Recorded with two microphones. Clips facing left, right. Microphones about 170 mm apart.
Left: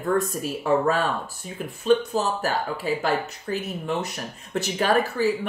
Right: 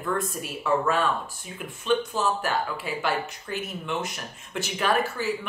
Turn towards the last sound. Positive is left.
turn(degrees=40)  # may be behind; listen again after turning